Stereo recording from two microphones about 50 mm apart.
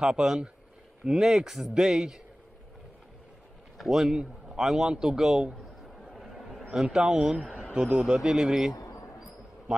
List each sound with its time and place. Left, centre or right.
0.0 s speech: centre
3.7 s speech: centre
6.1 s a sound: centre
6.7 s a man's voice: centre